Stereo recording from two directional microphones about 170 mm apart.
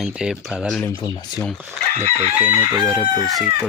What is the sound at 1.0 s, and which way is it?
Speech, 25° left (ahead or behind).